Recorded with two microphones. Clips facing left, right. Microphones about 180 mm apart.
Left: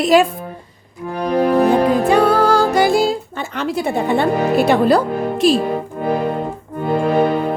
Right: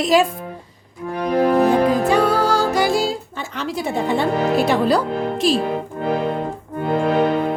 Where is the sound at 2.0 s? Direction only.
55° left (ahead or behind).